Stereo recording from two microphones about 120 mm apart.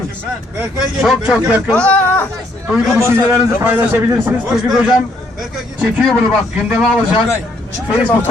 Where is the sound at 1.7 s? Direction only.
10° left (ahead or behind).